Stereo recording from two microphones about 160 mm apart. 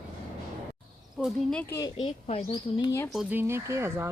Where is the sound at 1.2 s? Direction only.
5° left (ahead or behind).